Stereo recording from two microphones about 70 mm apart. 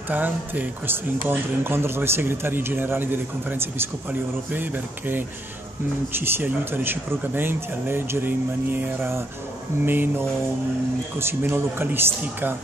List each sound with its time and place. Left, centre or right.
0.1 s speech: right
9.8 s a sound: right
11.1 s speech: right